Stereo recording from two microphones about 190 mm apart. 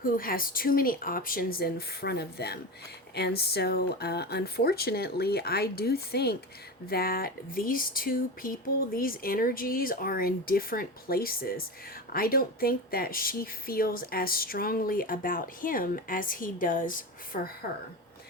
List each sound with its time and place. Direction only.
0.0 s speech: 50° left (ahead or behind)